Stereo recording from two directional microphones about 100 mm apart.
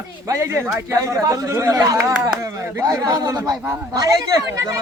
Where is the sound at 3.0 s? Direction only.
45° right (ahead or behind).